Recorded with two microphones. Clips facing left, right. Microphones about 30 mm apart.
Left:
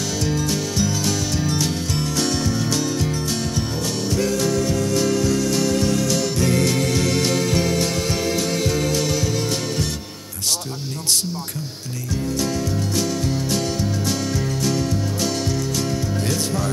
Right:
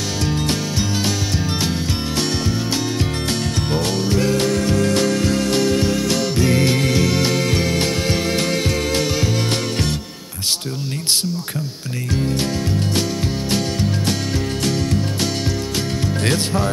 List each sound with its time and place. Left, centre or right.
0.7 s music: right
3.5 s music: right
3.9 s music: right
7.0 s music: right